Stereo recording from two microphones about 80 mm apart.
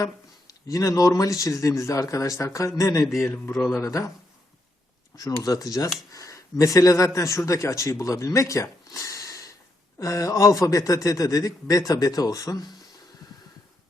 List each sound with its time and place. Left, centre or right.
0.0 s speech: left
5.1 s speech: left